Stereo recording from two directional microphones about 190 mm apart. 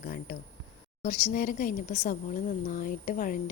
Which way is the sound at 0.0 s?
50° left (ahead or behind).